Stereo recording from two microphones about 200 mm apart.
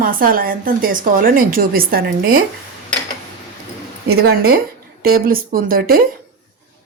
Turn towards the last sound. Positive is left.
turn(degrees=-45)  # may be behind; listen again after turning